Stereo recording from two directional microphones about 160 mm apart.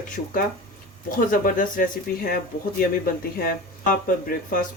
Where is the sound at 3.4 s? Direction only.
60° left (ahead or behind).